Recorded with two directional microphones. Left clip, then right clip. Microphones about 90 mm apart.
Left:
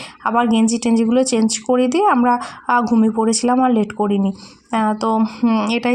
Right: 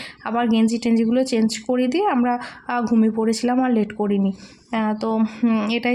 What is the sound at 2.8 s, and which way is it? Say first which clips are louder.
A woman's voice: left 3 dB; 15° left (ahead or behind).